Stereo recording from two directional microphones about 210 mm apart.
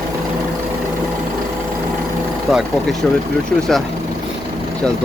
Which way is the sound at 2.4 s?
Centre (ahead or behind).